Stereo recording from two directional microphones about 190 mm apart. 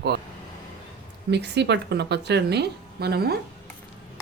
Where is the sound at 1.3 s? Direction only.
65° right (ahead or behind).